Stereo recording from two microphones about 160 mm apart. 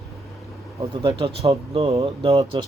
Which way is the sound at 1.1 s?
35° right (ahead or behind).